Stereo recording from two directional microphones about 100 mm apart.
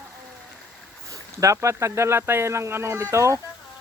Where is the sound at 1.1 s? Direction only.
35° right (ahead or behind).